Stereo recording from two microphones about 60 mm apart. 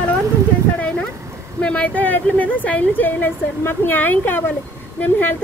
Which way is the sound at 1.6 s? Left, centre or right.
Left.